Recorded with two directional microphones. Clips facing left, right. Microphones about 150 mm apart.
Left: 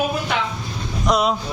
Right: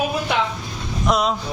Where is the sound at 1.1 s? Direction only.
Centre (ahead or behind).